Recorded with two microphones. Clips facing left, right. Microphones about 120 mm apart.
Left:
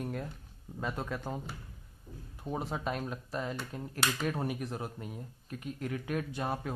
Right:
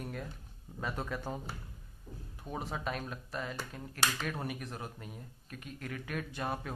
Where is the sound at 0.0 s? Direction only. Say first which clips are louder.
Left 4 dB; 15° left (ahead or behind).